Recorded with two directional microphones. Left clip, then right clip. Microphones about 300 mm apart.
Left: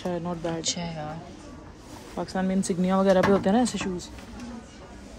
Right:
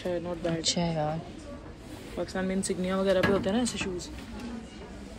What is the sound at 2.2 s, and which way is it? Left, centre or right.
Speech, left.